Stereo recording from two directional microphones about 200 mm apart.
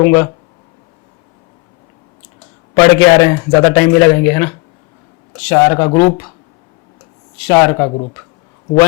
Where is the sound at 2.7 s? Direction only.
10° left (ahead or behind).